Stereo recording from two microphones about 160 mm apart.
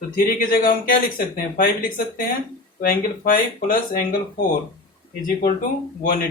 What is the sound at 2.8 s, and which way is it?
Speech, 60° left (ahead or behind).